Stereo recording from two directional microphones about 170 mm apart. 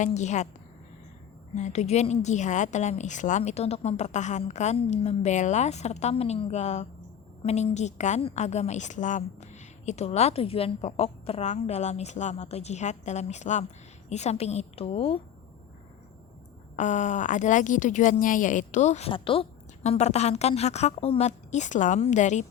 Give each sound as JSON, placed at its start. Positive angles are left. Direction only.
{"t": 0.0, "sound": "speech", "side_deg": 45}
{"t": 1.5, "sound": "a woman's voice", "side_deg": 40}
{"t": 16.7, "sound": "speech", "side_deg": 45}